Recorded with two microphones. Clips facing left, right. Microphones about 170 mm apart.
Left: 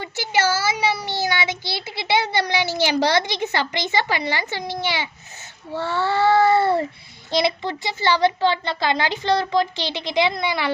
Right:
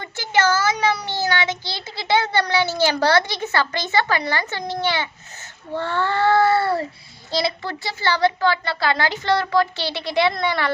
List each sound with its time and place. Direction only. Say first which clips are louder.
0.0 s a child's voice: right 1 dB; 10° left (ahead or behind)